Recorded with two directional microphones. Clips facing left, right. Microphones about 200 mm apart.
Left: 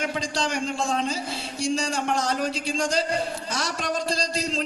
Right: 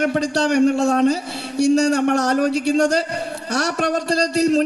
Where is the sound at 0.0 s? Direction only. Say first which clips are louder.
Right 9 dB; 65° right (ahead or behind).